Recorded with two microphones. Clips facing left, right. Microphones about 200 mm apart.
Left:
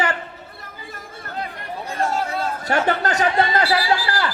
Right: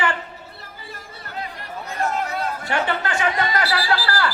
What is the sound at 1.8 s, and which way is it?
Chatter, 30° left (ahead or behind).